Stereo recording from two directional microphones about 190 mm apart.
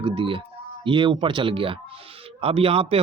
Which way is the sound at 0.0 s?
25° right (ahead or behind).